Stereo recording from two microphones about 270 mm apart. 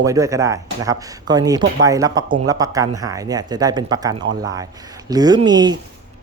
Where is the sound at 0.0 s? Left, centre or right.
Centre.